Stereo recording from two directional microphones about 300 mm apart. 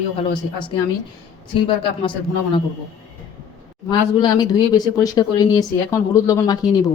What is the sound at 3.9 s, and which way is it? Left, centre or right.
Speech, centre.